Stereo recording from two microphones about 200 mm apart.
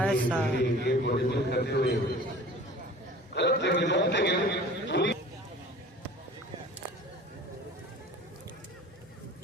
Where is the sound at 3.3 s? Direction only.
60° left (ahead or behind).